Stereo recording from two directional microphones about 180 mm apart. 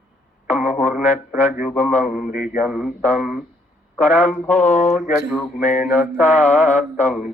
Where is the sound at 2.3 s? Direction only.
50° left (ahead or behind).